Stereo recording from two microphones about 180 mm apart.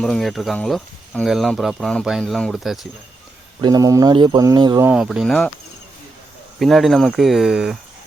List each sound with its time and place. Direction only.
0.0 s speech: centre (ahead or behind)
3.6 s speech: 20° right (ahead or behind)
4.9 s speech: 5° right (ahead or behind)
6.6 s speech: centre (ahead or behind)